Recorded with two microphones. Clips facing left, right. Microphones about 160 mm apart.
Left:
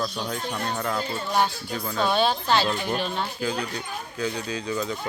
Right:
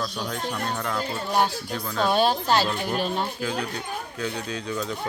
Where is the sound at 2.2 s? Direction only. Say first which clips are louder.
Right 1 dB; 40° right (ahead or behind).